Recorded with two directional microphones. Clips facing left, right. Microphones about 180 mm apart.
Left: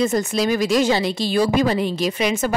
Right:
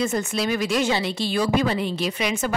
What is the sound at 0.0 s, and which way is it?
Speech, 35° left (ahead or behind).